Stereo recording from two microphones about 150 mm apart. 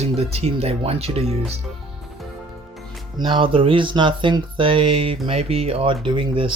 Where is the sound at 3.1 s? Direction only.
30° right (ahead or behind).